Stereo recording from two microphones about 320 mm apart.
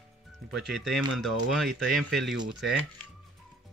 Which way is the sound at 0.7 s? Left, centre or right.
Centre.